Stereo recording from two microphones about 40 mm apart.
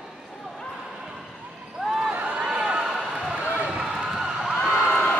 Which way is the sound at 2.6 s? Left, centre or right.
Right.